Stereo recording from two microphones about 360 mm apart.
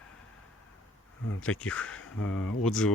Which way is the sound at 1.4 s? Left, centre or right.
Centre.